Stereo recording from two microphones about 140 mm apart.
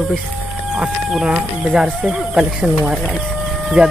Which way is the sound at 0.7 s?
5° right (ahead or behind).